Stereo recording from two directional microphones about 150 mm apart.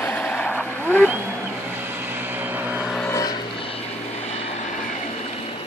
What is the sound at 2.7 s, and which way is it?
Vehicle, 10° right (ahead or behind).